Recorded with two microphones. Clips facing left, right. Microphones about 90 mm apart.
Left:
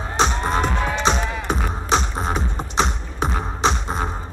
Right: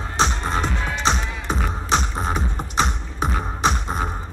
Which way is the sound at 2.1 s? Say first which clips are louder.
Left 1 dB; 20° left (ahead or behind).